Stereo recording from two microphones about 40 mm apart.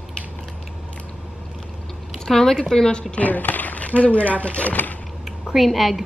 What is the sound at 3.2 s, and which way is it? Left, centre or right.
Speech, left.